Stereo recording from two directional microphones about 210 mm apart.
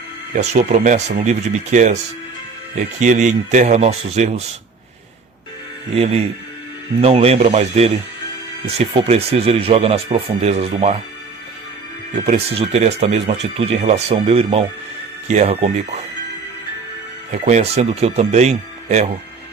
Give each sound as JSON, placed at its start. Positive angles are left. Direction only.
{"t": 0.3, "sound": "speech", "side_deg": -35}
{"t": 3.0, "sound": "speech", "side_deg": -35}
{"t": 6.0, "sound": "speech", "side_deg": -30}
{"t": 12.2, "sound": "speech", "side_deg": -30}
{"t": 17.3, "sound": "speech", "side_deg": -35}